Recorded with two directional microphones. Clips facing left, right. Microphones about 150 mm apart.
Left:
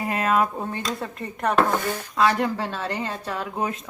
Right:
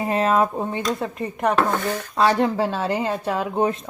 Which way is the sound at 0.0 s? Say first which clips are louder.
Right 3 dB; 25° right (ahead or behind).